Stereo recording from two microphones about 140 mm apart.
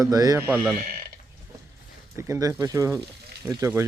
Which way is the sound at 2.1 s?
20° right (ahead or behind).